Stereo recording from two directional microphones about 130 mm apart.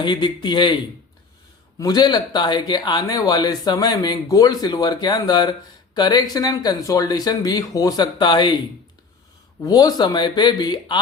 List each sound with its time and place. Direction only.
0.0 s speech: 35° left (ahead or behind)
1.8 s speech: 30° left (ahead or behind)
9.6 s speech: 30° left (ahead or behind)